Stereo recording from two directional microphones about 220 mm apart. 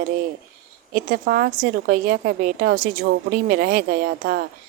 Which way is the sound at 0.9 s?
40° right (ahead or behind).